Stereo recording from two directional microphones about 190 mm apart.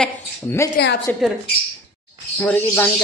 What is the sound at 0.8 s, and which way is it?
Speech, 55° left (ahead or behind).